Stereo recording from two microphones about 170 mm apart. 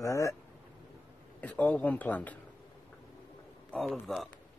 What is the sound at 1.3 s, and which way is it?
Speech, 10° left (ahead or behind).